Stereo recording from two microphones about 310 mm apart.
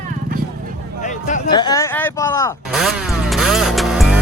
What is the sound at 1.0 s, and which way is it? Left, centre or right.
Speech, left.